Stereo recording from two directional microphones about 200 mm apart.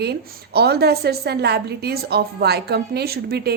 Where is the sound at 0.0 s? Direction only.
55° right (ahead or behind).